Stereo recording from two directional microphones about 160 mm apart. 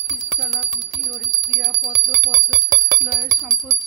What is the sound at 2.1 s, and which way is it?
Speech, 20° right (ahead or behind).